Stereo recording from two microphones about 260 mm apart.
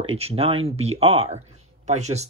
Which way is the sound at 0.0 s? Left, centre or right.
Right.